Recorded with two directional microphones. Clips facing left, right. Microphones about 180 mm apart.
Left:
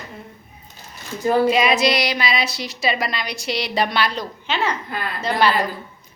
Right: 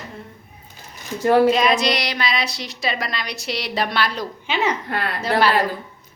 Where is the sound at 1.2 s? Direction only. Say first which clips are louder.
Right 3 dB; 70° right (ahead or behind).